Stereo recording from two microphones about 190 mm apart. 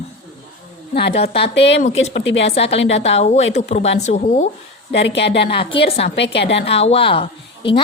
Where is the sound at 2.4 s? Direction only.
30° left (ahead or behind).